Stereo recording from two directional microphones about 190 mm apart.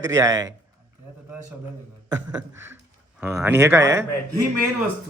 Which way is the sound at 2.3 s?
5° right (ahead or behind).